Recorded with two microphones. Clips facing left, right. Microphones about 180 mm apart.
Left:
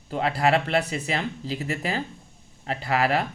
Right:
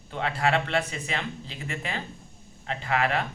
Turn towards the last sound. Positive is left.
turn(degrees=35)  # may be behind; listen again after turning